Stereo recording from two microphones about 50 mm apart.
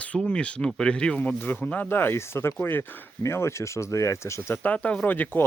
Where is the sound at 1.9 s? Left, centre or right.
Left.